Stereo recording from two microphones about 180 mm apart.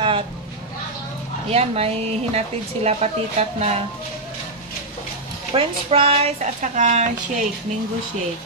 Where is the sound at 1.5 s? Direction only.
35° right (ahead or behind).